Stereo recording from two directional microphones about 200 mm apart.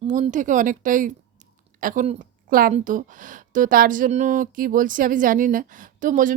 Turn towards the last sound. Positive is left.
turn(degrees=-40)  # may be behind; listen again after turning